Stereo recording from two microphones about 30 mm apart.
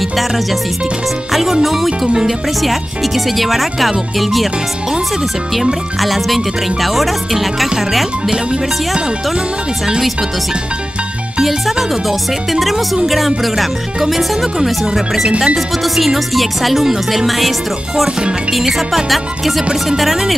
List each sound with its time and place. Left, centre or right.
1.3 s speech: centre
5.6 s speech: centre
11.4 s speech: centre
15.2 s speech: right
15.5 s speech: centre
19.0 s music: centre
20.0 s speech: centre